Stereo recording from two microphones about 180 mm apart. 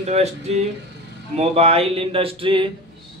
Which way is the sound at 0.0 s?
40° right (ahead or behind).